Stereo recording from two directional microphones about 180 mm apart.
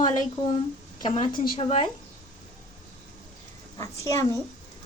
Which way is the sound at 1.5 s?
30° left (ahead or behind).